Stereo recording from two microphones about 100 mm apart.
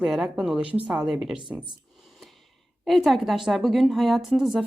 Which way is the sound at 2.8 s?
Centre (ahead or behind).